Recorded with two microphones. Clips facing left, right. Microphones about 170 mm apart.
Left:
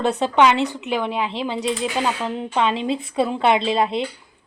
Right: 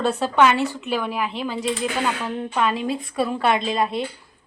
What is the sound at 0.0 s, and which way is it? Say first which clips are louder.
A woman's voice: left 1 dB; 20° left (ahead or behind).